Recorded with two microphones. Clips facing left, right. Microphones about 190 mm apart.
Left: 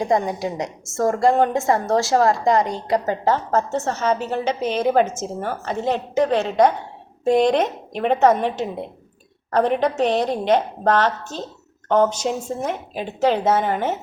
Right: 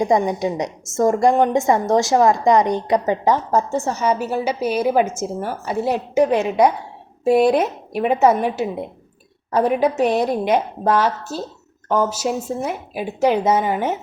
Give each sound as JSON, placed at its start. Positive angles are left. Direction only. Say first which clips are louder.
{"t": 0.0, "sound": "a woman's voice", "louder": "right 3 dB", "side_deg": -20}